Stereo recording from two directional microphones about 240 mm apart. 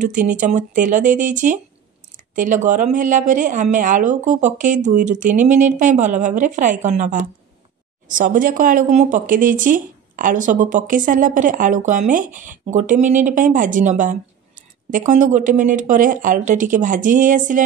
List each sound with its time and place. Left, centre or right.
0.0 s speech: right